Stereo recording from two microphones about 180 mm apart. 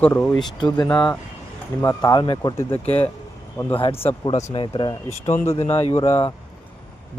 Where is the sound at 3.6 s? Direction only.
10° left (ahead or behind).